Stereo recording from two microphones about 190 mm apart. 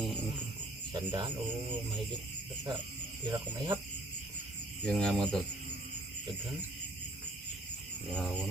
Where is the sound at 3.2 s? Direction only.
20° right (ahead or behind).